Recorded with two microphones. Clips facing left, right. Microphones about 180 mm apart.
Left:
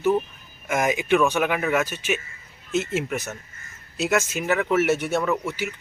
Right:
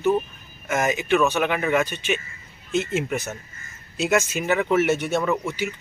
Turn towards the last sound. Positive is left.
turn(degrees=5)  # may be behind; listen again after turning